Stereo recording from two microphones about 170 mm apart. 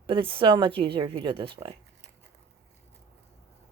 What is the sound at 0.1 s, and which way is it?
A woman's voice, 30° right (ahead or behind).